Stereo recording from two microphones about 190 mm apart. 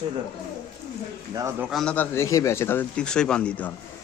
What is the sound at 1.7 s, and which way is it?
A man's voice, 5° left (ahead or behind).